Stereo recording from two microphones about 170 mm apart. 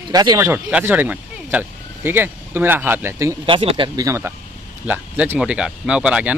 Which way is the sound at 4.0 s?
15° right (ahead or behind).